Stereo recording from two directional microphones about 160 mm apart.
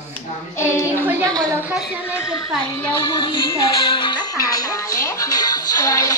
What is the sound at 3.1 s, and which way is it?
Music, 30° left (ahead or behind).